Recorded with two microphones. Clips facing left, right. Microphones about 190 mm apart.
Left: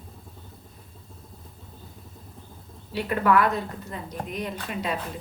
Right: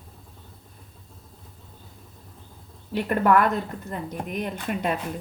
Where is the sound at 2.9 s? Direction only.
50° right (ahead or behind).